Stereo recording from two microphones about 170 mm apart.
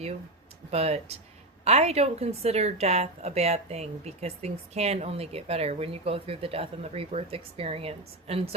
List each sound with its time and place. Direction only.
0.7 s a woman's voice: 40° right (ahead or behind)